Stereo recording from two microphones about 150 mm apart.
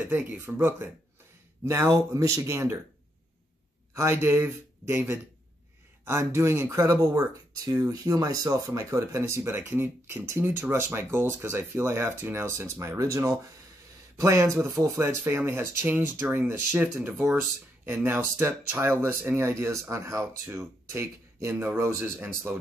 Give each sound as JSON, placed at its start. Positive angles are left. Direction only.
{"t": 0.1, "sound": "speech", "side_deg": -10}
{"t": 3.9, "sound": "speech", "side_deg": -15}